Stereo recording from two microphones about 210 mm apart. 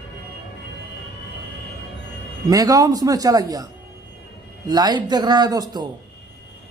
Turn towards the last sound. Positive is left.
turn(degrees=-20)  # may be behind; listen again after turning